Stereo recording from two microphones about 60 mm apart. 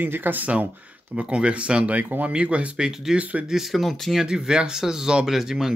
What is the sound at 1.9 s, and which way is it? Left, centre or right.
Speech, right.